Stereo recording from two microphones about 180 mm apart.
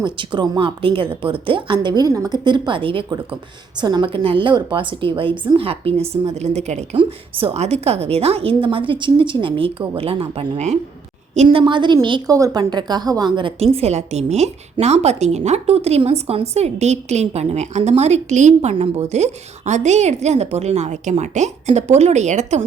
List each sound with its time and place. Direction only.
0.0 s a woman's voice: 25° right (ahead or behind)
11.4 s a woman's voice: 25° right (ahead or behind)